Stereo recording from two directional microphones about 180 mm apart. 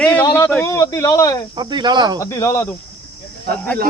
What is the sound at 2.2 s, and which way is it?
Speech, 15° left (ahead or behind).